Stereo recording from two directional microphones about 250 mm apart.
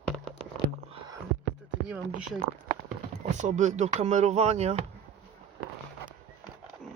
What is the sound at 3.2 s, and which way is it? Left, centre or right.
Speech, right.